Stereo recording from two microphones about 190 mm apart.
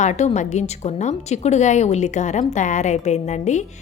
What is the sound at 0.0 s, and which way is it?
A woman's voice, 35° left (ahead or behind).